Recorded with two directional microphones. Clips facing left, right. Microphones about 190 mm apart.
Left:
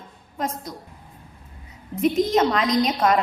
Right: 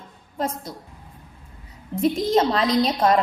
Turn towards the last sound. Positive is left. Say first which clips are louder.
# right 1 dB
turn(degrees=-30)  # may be behind; listen again after turning